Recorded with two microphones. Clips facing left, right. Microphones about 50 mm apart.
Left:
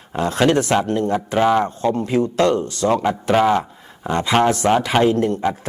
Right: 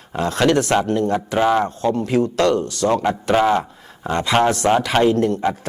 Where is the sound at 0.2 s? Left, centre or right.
Centre.